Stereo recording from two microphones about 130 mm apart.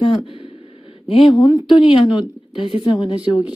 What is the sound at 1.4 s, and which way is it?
A woman's voice, 30° left (ahead or behind).